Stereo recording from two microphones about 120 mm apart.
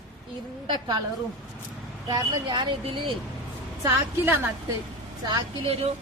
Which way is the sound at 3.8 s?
20° right (ahead or behind).